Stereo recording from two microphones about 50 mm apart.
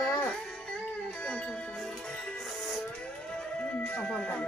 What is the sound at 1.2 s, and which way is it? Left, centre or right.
Music, centre.